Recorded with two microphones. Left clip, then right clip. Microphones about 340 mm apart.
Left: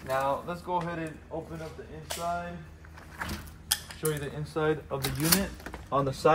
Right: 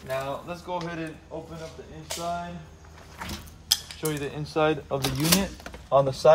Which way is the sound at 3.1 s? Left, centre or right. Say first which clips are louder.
Even; centre.